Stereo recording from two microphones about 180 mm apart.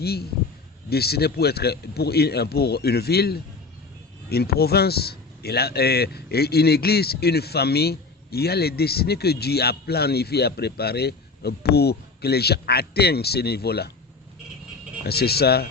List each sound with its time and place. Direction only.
0.0 s speech: 60° left (ahead or behind)
15.0 s speech: 60° left (ahead or behind)